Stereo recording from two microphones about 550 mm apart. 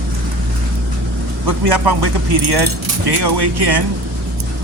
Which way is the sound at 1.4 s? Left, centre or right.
Right.